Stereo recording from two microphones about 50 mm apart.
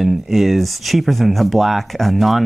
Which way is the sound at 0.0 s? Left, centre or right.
Centre.